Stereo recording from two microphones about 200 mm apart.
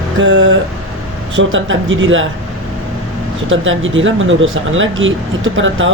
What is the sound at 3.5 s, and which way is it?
Speech, 75° right (ahead or behind).